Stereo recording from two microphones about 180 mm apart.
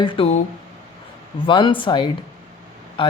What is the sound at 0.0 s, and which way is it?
Speech, 30° left (ahead or behind).